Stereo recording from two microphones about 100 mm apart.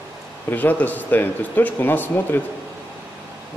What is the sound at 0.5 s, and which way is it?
Speech, 15° left (ahead or behind).